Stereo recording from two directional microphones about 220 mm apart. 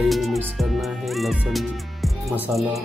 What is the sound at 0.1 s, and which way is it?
Music, centre (ahead or behind).